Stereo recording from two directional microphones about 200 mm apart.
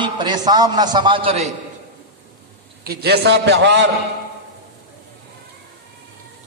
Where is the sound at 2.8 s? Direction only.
50° right (ahead or behind).